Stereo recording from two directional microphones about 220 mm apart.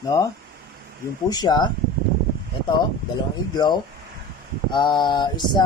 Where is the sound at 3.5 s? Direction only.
20° left (ahead or behind).